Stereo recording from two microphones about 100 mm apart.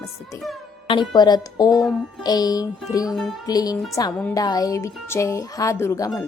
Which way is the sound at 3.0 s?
Centre (ahead or behind).